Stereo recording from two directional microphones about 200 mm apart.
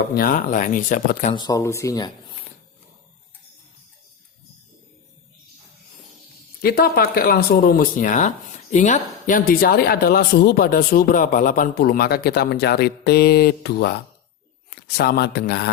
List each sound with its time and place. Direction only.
0.1 s speech: 45° left (ahead or behind)
1.5 s speech: 15° left (ahead or behind)
6.6 s speech: 50° left (ahead or behind)